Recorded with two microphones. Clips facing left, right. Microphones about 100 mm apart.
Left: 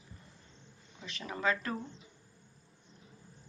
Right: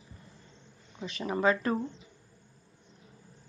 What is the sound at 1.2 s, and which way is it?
Speech, 30° right (ahead or behind).